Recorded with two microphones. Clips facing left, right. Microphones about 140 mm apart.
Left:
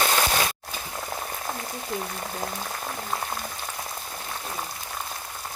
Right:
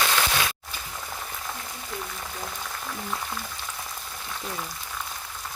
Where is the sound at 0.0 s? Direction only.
40° left (ahead or behind).